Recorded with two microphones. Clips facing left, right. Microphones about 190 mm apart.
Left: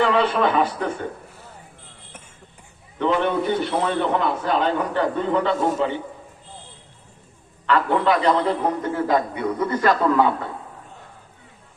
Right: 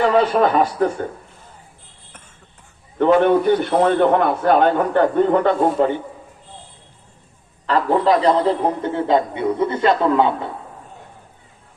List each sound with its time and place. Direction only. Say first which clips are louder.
0.0 s a man's voice: right 4 dB; 45° right (ahead or behind)
3.0 s a man's voice: right 7 dB; 50° right (ahead or behind)
7.7 s a man's voice: right 3 dB; 35° right (ahead or behind)